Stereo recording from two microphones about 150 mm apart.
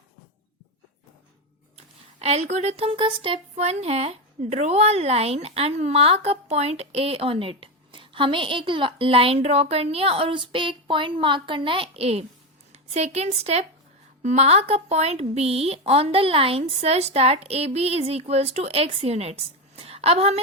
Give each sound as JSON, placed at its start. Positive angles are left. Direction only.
{"t": 2.1, "sound": "a woman's voice", "side_deg": -45}
{"t": 3.5, "sound": "a woman's voice", "side_deg": -45}